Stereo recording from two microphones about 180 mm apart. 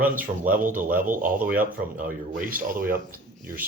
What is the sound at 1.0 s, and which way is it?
Speech, 50° right (ahead or behind).